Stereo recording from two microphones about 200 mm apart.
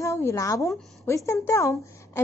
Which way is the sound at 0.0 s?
15° left (ahead or behind).